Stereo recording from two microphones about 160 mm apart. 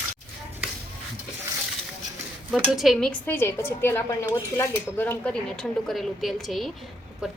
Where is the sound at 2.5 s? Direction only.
Centre (ahead or behind).